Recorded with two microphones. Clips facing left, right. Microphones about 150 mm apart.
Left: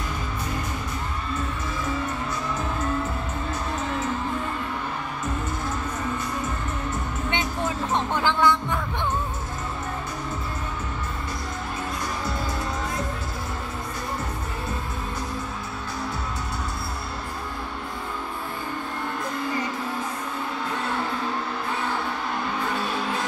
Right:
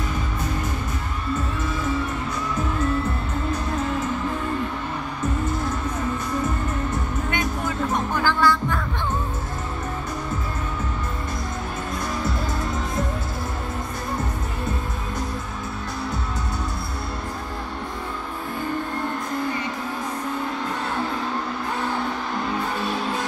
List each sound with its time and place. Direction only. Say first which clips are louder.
7.2 s music: left 1 dB; 25° left (ahead or behind)